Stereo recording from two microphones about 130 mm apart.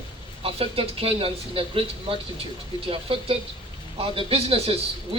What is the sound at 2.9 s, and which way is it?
A man's voice, 45° right (ahead or behind).